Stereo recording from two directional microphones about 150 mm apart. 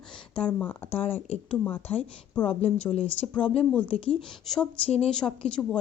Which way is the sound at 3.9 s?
40° left (ahead or behind).